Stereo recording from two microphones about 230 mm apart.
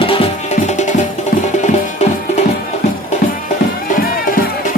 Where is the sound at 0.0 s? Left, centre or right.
Left.